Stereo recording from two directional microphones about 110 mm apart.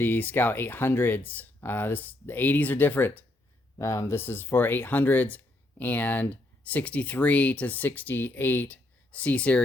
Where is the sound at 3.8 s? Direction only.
30° left (ahead or behind).